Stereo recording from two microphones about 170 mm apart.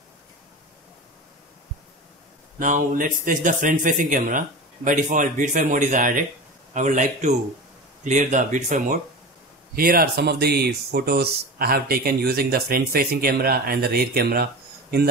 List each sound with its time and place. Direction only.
2.6 s speech: 50° right (ahead or behind)
9.8 s speech: 60° right (ahead or behind)